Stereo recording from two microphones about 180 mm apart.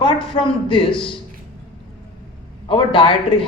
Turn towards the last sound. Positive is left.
turn(degrees=30)  # may be behind; listen again after turning